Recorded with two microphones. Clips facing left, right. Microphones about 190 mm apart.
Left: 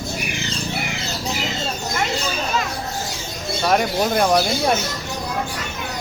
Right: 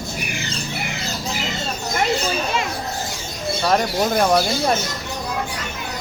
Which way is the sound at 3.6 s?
5° left (ahead or behind).